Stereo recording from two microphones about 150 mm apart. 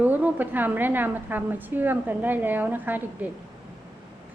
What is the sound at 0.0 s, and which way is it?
A woman's voice, 10° right (ahead or behind).